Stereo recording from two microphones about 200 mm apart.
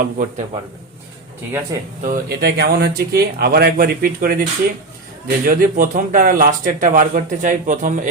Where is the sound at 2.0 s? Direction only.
50° right (ahead or behind).